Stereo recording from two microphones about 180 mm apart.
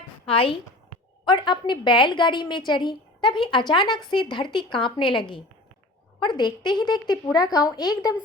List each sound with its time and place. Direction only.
0.3 s a woman's voice: 30° left (ahead or behind)